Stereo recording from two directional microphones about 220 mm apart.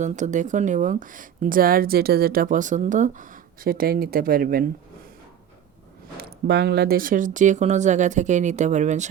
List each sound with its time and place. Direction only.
0.0 s speech: 35° right (ahead or behind)
6.1 s speech: 50° right (ahead or behind); by 9.0 s 30° right (ahead or behind)